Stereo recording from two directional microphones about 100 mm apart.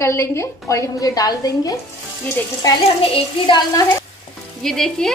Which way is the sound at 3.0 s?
55° left (ahead or behind).